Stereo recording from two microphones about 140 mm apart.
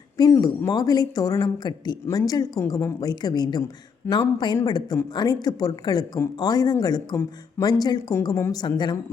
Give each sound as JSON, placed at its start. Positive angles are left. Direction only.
{"t": 0.2, "sound": "speech", "side_deg": 25}
{"t": 4.0, "sound": "speech", "side_deg": 15}
{"t": 4.5, "sound": "a woman's voice", "side_deg": 30}